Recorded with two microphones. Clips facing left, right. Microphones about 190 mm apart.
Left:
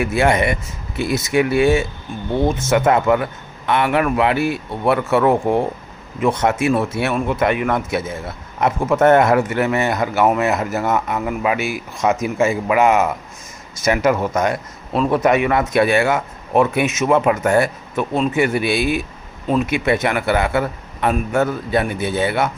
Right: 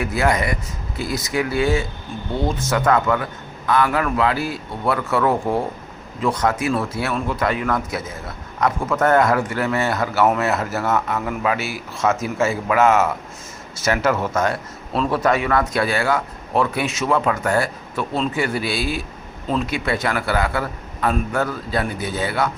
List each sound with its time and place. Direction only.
0.0 s a man's voice: 25° left (ahead or behind)